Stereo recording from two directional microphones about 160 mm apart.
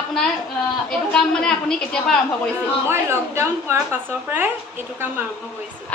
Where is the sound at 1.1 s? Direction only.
5° left (ahead or behind).